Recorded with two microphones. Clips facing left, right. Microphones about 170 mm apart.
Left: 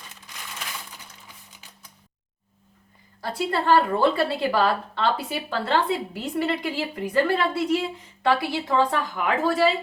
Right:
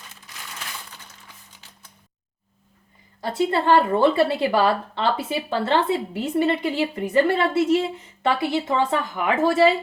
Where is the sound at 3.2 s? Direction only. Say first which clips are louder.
Right 3 dB; 25° right (ahead or behind).